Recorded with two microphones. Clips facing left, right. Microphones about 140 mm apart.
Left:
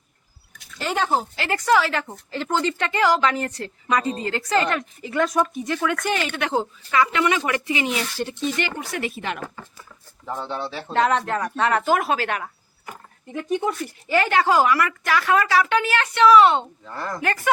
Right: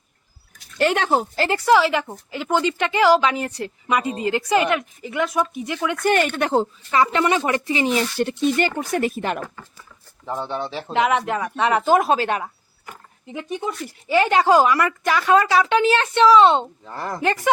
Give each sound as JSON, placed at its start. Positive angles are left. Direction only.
{"t": 0.8, "sound": "speech", "side_deg": -70}
{"t": 1.4, "sound": "speech", "side_deg": -35}
{"t": 1.7, "sound": "speech", "side_deg": -15}
{"t": 6.1, "sound": "a woman's voice", "side_deg": -50}
{"t": 8.1, "sound": "speech", "side_deg": -60}
{"t": 8.5, "sound": "a woman's voice", "side_deg": -45}
{"t": 10.2, "sound": "speech", "side_deg": -20}